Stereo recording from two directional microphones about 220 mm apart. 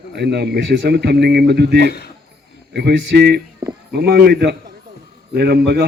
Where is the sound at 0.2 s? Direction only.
50° right (ahead or behind).